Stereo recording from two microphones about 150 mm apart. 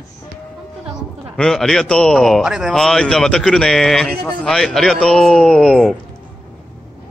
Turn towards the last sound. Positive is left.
turn(degrees=5)  # may be behind; listen again after turning